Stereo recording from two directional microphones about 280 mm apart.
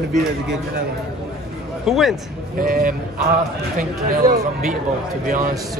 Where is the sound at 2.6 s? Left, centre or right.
Right.